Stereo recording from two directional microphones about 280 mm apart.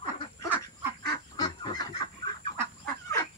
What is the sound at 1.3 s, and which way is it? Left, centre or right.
Fowl, centre.